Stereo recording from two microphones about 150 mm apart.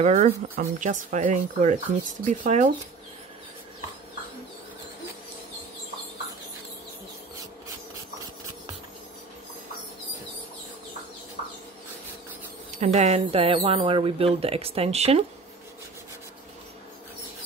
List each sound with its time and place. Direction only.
0.0 s speech: 50° right (ahead or behind)
12.7 s speech: 50° right (ahead or behind)